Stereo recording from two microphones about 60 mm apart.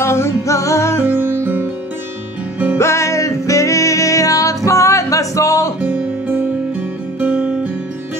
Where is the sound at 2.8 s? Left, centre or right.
Left.